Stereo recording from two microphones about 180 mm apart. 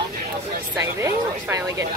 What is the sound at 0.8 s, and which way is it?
Speech, 15° right (ahead or behind).